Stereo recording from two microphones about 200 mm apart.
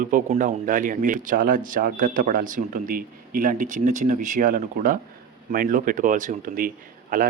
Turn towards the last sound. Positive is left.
turn(degrees=-45)  # may be behind; listen again after turning